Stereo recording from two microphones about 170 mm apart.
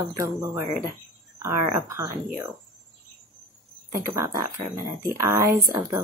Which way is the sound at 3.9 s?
20° right (ahead or behind).